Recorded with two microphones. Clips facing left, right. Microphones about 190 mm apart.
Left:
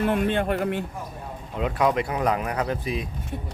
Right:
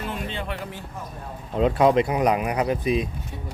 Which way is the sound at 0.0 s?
55° left (ahead or behind).